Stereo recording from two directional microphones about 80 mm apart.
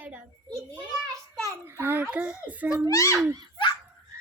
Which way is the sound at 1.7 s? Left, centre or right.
Right.